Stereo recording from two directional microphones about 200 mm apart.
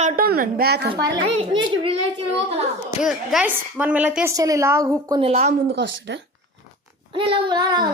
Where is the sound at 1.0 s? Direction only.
20° right (ahead or behind).